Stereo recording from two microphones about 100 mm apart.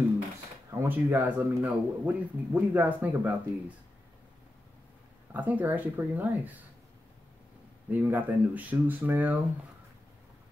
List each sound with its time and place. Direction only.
0.7 s speech: 25° right (ahead or behind)
5.3 s speech: 15° right (ahead or behind)
7.9 s speech: 15° right (ahead or behind)